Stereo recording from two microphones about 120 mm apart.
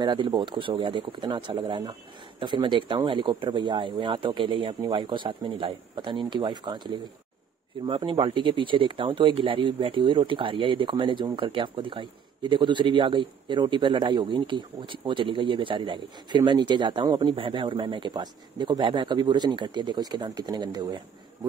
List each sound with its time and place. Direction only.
0.0 s a man's voice: 40° right (ahead or behind)